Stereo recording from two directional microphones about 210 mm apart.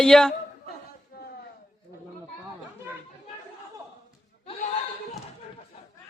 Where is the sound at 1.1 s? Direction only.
45° left (ahead or behind).